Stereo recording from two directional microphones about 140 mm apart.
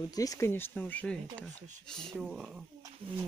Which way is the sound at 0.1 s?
25° left (ahead or behind).